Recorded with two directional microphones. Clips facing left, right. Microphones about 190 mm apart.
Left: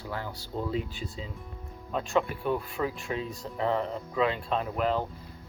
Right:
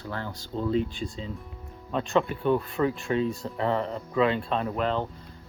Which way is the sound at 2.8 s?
80° right.